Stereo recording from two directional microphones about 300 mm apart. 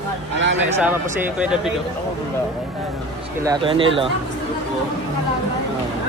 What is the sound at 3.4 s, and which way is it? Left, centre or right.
Speech, centre.